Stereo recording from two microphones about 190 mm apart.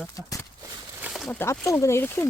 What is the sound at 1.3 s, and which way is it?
Speech, 10° left (ahead or behind).